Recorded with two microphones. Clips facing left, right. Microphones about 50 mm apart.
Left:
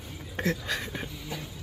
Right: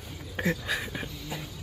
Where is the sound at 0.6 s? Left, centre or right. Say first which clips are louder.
Right 1 dB; centre.